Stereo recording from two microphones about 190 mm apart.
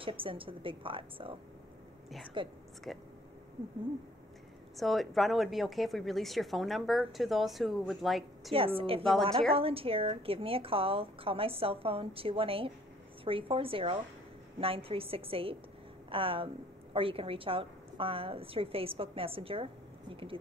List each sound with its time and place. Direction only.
0.0 s a woman's voice: 30° right (ahead or behind)
2.4 s a woman's voice: 25° right (ahead or behind)
4.7 s a woman's voice: centre (ahead or behind)
8.5 s a woman's voice: 30° right (ahead or behind)